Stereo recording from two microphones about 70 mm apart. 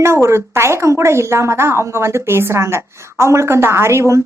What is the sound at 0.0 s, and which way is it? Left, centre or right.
A woman's voice, right.